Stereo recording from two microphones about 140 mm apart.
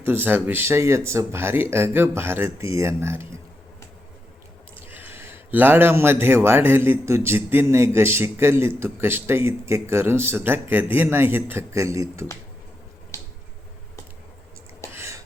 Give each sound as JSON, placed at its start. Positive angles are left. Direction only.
{"t": 0.0, "sound": "speech", "side_deg": -15}
{"t": 4.9, "sound": "speech", "side_deg": -15}
{"t": 13.1, "sound": "finger snapping", "side_deg": 20}
{"t": 14.9, "sound": "a sound", "side_deg": -20}